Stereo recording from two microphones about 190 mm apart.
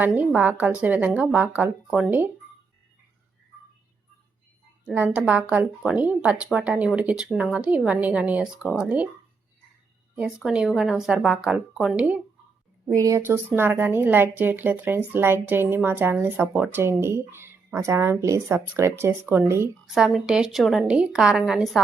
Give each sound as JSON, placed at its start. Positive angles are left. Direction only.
{"t": 0.0, "sound": "speech", "side_deg": -10}
{"t": 4.9, "sound": "speech", "side_deg": -10}
{"t": 10.2, "sound": "a woman's voice", "side_deg": -5}
{"t": 12.9, "sound": "speech", "side_deg": -15}
{"t": 19.8, "sound": "a woman's voice", "side_deg": 0}